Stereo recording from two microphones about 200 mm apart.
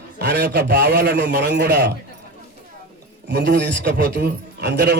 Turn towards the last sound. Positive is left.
turn(degrees=-55)  # may be behind; listen again after turning